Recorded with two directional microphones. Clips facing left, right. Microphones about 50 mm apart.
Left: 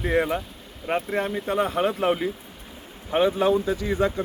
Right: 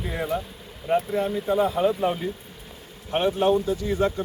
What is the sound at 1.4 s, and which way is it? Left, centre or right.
Speech, left.